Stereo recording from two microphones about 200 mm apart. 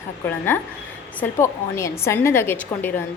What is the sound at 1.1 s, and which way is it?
A woman's voice, 15° left (ahead or behind).